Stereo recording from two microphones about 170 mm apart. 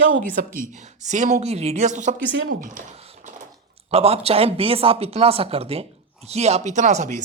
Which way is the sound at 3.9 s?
35° right (ahead or behind).